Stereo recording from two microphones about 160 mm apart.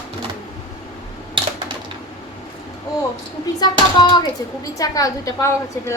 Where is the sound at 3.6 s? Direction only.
25° left (ahead or behind).